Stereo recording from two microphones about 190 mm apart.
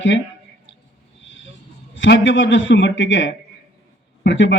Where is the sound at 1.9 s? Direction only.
75° left (ahead or behind).